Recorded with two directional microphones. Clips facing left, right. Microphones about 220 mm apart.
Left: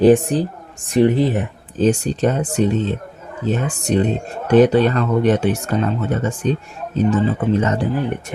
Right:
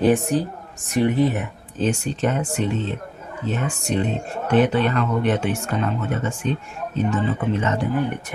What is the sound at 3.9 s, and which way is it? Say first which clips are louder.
Speech: left 6 dB; 35° left (ahead or behind).